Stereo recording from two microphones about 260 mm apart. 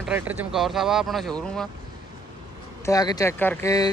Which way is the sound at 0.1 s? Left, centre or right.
Centre.